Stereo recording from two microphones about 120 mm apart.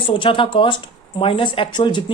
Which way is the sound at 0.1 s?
45° left (ahead or behind).